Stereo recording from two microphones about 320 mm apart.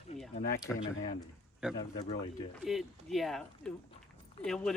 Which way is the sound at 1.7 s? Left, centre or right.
Centre.